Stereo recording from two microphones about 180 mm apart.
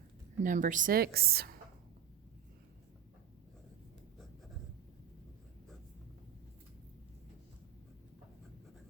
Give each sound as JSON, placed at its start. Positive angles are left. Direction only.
{"t": 0.4, "sound": "a woman's voice", "side_deg": -45}